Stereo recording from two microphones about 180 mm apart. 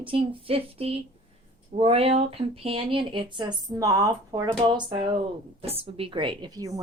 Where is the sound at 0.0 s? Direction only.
30° right (ahead or behind).